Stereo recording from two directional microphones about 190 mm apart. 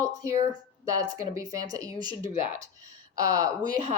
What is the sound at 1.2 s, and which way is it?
Speech, 20° right (ahead or behind).